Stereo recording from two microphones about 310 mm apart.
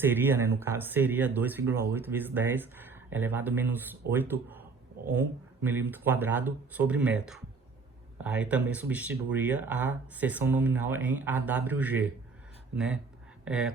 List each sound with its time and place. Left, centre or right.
0.0 s speech: centre